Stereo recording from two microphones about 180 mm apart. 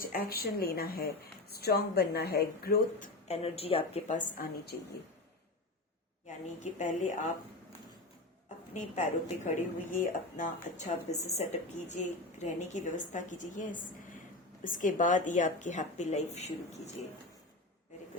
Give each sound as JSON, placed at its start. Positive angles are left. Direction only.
{"t": 0.0, "sound": "a woman's voice", "side_deg": 55}
{"t": 3.2, "sound": "a woman's voice", "side_deg": 35}
{"t": 6.2, "sound": "a woman's voice", "side_deg": 40}
{"t": 8.7, "sound": "a woman's voice", "side_deg": 40}